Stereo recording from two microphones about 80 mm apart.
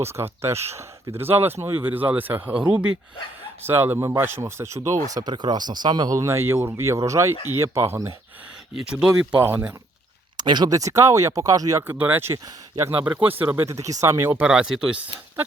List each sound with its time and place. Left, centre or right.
0.0 s speech: right; by 2.9 s centre
3.6 s speech: right
6.1 s speech: right
8.7 s speech: centre
9.4 s speech: right
10.3 s a sound: right
10.7 s speech: right
11.9 s speech: right
13.1 s speech: right
13.7 s speech: right
14.3 s speech: centre
14.5 s speech: centre